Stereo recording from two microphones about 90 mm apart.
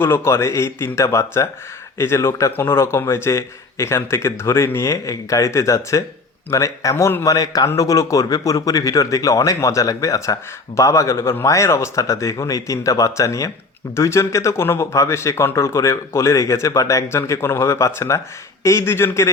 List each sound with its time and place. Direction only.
0.0 s a man's voice: 30° left (ahead or behind)
7.3 s speech: 40° left (ahead or behind)